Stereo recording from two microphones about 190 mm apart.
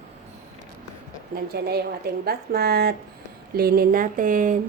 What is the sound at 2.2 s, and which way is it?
Speech, 55° right (ahead or behind).